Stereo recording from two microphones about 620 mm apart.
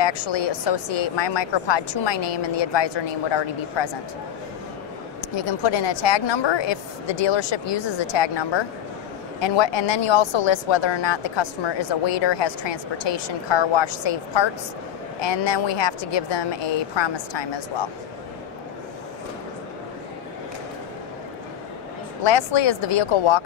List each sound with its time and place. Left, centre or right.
0.0 s a woman's voice: left
5.3 s a woman's voice: left
22.2 s speech: left